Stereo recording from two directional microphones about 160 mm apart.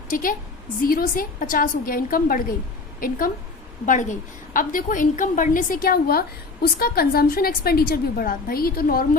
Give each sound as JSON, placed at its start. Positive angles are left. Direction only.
{"t": 0.1, "sound": "a woman's voice", "side_deg": 60}